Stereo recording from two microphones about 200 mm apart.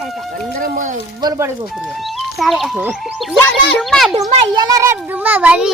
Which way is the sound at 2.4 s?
Centre (ahead or behind).